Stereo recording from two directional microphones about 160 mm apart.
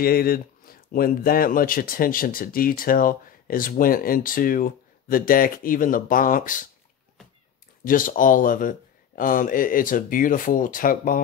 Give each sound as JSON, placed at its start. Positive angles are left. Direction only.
{"t": 0.0, "sound": "speech", "side_deg": 70}
{"t": 7.8, "sound": "speech", "side_deg": 60}